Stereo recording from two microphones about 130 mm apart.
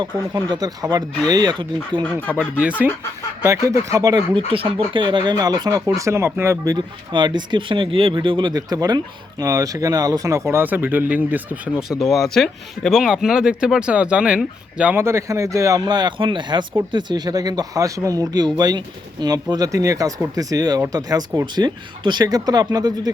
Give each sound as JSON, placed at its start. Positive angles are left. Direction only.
{"t": 0.0, "sound": "speech", "side_deg": -30}
{"t": 2.4, "sound": "speech", "side_deg": -10}
{"t": 3.4, "sound": "speech", "side_deg": -25}
{"t": 4.4, "sound": "speech", "side_deg": -45}
{"t": 6.7, "sound": "speech", "side_deg": -35}